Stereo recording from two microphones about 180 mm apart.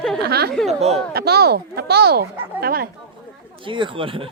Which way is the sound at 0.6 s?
35° right (ahead or behind).